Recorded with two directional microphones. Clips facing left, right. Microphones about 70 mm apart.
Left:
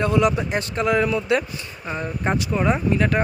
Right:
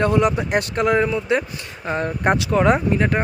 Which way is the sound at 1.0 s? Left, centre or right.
Right.